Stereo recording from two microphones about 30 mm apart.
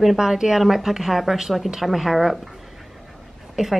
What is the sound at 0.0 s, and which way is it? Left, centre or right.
A woman's voice, centre.